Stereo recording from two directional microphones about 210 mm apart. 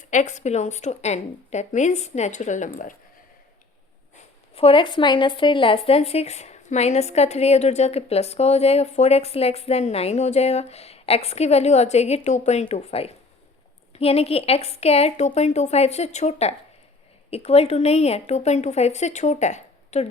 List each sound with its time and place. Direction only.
0.1 s speech: 35° left (ahead or behind)
4.5 s a woman's voice: 25° left (ahead or behind)